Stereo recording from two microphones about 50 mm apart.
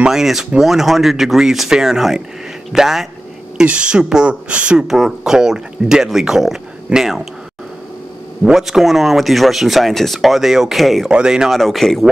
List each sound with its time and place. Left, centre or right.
0.1 s speech: centre
3.6 s speech: right
4.7 s speech: centre
8.5 s speech: centre
11.1 s speech: centre
11.5 s speech: centre